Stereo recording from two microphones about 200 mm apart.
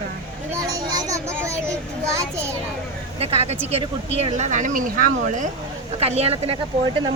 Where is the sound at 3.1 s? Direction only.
30° right (ahead or behind).